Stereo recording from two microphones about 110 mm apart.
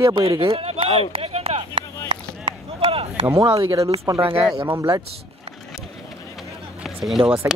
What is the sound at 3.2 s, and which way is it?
Speech, 25° right (ahead or behind).